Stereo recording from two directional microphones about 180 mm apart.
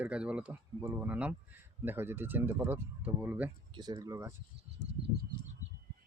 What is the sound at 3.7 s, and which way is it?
Speech, 20° right (ahead or behind).